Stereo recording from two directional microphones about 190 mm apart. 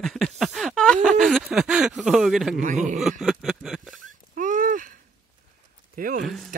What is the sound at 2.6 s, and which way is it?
Speech, 40° right (ahead or behind).